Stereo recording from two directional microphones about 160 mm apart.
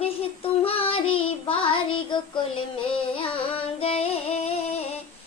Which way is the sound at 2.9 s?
35° left (ahead or behind).